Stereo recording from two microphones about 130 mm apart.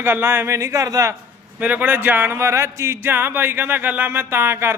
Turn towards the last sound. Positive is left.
turn(degrees=-20)  # may be behind; listen again after turning